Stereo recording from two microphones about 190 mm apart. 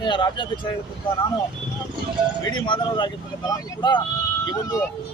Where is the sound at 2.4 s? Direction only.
25° left (ahead or behind).